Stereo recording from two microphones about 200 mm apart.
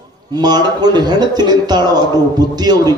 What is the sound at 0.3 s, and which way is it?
A man's voice, 20° right (ahead or behind).